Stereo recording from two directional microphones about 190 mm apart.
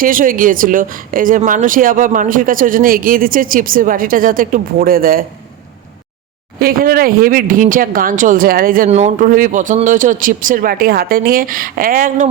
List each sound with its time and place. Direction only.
0.0 s speech: 45° right (ahead or behind)
6.6 s speech: 50° right (ahead or behind)
8.9 s speech: 35° right (ahead or behind)